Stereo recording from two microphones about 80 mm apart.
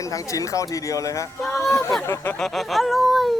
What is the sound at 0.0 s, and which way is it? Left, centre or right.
Speech, left.